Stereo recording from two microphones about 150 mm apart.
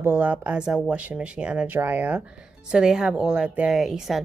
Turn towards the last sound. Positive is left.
turn(degrees=0)  # may be behind; listen again after turning